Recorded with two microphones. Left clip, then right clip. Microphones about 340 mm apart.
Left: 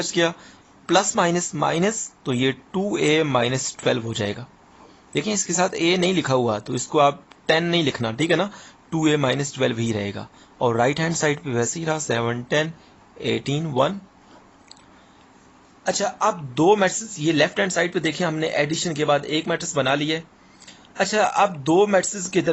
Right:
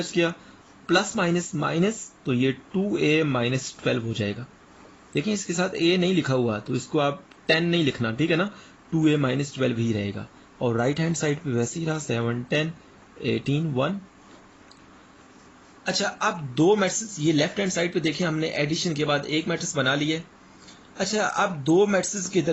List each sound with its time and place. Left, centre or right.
0.1 s speech: centre
15.8 s speech: centre